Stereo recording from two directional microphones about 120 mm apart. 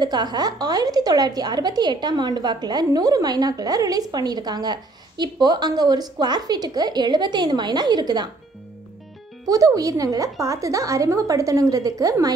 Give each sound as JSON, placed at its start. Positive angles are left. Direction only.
{"t": 0.0, "sound": "speech", "side_deg": -35}
{"t": 9.5, "sound": "a woman's voice", "side_deg": -30}